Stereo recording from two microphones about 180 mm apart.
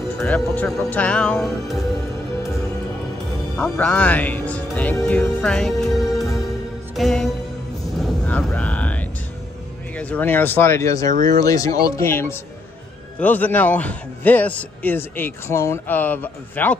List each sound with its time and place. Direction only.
0.2 s speech: 10° left (ahead or behind)
3.5 s speech: 5° left (ahead or behind)
8.0 s a sound: 5° left (ahead or behind)
9.9 s a man's voice: 10° left (ahead or behind)